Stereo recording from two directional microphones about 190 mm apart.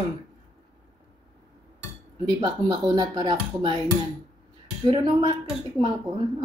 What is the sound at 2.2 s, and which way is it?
Speech, 20° right (ahead or behind).